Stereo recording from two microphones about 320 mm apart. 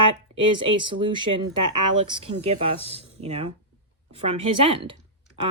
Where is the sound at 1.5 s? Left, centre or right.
Right.